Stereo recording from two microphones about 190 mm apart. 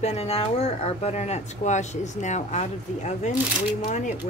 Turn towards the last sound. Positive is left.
turn(degrees=40)  # may be behind; listen again after turning